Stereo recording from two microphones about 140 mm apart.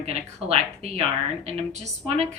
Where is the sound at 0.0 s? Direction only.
50° right (ahead or behind).